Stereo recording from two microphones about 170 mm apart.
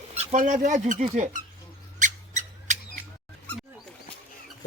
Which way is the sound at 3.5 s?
10° left (ahead or behind).